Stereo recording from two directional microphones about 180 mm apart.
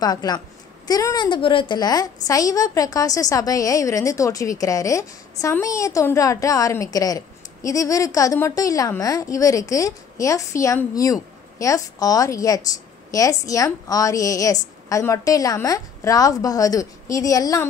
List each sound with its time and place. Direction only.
0.0 s a woman's voice: 20° left (ahead or behind)